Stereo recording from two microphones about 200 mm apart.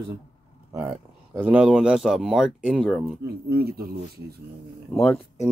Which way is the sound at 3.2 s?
50° right (ahead or behind).